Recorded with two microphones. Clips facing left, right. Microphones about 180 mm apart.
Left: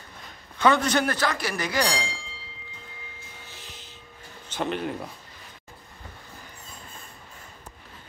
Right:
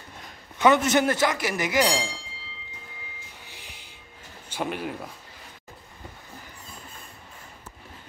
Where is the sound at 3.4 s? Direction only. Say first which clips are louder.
Left 1 dB; 15° right (ahead or behind).